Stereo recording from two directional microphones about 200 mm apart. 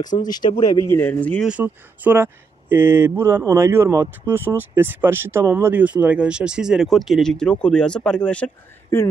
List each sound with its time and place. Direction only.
0.2 s speech: 20° left (ahead or behind)
1.5 s speech: 10° right (ahead or behind)